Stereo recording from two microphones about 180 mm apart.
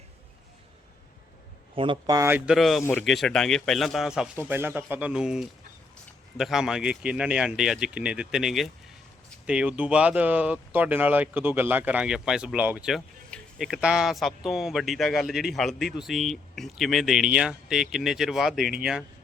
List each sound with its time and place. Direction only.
1.7 s speech: 30° right (ahead or behind); by 2.6 s 10° right (ahead or behind)
2.6 s speech: centre (ahead or behind)